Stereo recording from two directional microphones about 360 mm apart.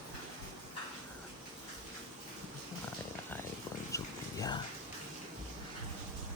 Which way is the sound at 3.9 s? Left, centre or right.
Centre.